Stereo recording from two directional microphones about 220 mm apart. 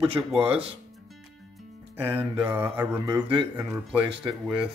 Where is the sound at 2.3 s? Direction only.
10° right (ahead or behind).